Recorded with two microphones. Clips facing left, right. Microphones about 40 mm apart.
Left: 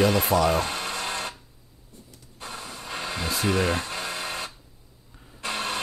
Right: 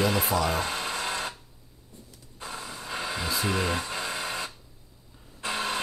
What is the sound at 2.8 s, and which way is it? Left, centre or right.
Vehicle, left.